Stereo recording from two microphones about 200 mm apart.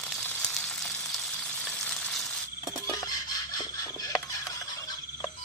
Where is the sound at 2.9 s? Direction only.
20° left (ahead or behind).